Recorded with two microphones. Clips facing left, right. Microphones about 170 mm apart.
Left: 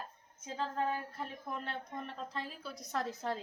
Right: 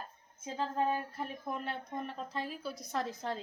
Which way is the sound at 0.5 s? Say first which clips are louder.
Right 3 dB; 15° right (ahead or behind).